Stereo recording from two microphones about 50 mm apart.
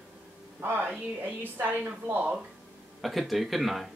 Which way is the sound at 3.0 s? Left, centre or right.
Centre.